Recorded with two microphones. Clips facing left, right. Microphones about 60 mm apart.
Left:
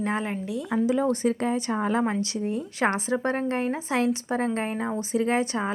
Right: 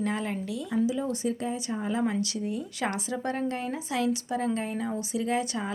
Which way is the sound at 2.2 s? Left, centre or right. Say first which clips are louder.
Left 3 dB; left.